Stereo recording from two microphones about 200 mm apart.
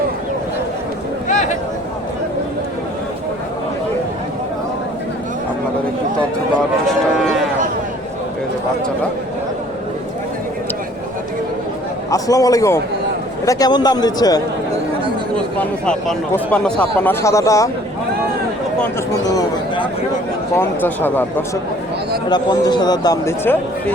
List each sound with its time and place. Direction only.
12.1 s speech: 15° left (ahead or behind)
15.5 s speech: 5° left (ahead or behind)
18.8 s a sound: 15° left (ahead or behind)
20.6 s speech: 10° left (ahead or behind)
22.3 s speech: 20° left (ahead or behind)